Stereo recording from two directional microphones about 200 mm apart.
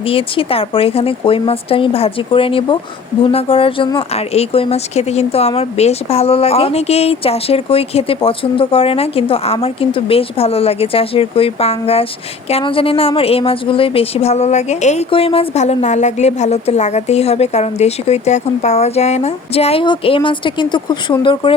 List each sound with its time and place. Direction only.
0.1 s a woman's voice: 30° left (ahead or behind)